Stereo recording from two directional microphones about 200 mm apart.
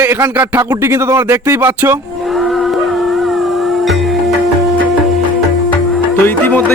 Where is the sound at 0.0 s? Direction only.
10° right (ahead or behind).